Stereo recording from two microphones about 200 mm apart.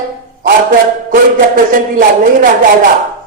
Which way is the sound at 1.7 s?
45° right (ahead or behind).